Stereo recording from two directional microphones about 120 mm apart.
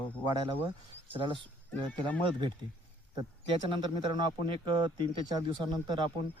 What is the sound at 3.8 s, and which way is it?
Speech, 40° right (ahead or behind).